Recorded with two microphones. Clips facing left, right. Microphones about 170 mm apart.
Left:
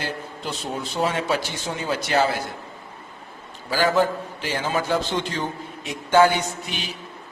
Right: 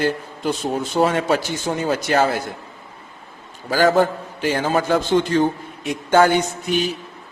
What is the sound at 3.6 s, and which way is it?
A man's voice, 50° right (ahead or behind).